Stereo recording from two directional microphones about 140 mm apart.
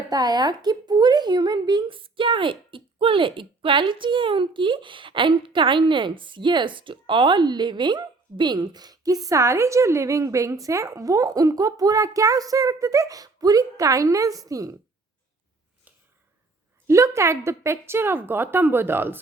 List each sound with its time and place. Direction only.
0.1 s a woman's voice: 30° right (ahead or behind)
16.8 s a woman's voice: 20° right (ahead or behind)